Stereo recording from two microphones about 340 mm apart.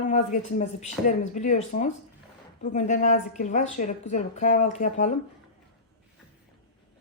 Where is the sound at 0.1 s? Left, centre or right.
Left.